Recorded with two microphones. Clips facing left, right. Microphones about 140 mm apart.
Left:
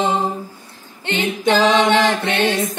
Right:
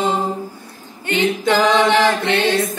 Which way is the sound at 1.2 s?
15° left (ahead or behind).